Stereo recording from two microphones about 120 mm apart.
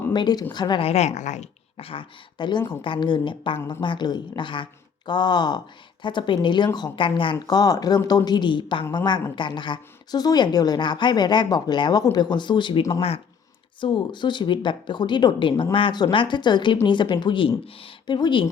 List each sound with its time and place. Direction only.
0.1 s a woman's voice: 35° left (ahead or behind)
0.8 s a woman's voice: 60° left (ahead or behind)
1.8 s speech: 45° left (ahead or behind)
7.4 s speech: 30° left (ahead or behind)
12.9 s speech: 50° left (ahead or behind)
13.8 s speech: 40° left (ahead or behind)